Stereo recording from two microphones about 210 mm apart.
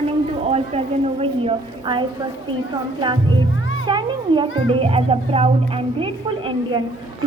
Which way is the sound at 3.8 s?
20° right (ahead or behind).